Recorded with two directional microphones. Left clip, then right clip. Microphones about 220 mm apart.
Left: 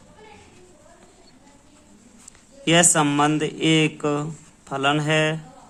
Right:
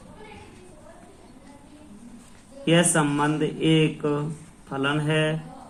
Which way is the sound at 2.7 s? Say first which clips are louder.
Left 3 dB; 50° left (ahead or behind).